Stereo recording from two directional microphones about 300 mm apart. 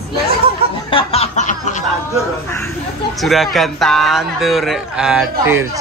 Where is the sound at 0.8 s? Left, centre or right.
Centre.